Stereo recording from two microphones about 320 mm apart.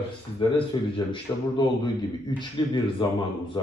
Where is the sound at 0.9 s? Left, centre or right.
Centre.